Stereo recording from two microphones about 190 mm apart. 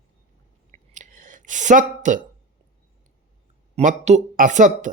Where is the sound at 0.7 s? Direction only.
40° right (ahead or behind).